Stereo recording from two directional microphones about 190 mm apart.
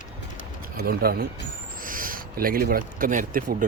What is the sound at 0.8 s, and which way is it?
Speech, 55° right (ahead or behind).